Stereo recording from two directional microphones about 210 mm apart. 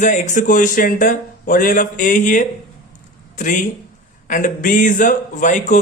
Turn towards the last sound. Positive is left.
turn(degrees=35)  # may be behind; listen again after turning